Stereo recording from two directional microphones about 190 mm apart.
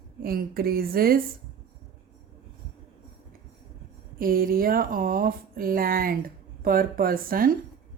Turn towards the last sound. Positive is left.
turn(degrees=-50)  # may be behind; listen again after turning